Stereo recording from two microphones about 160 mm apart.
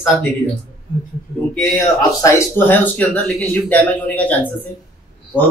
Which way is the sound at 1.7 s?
20° left (ahead or behind).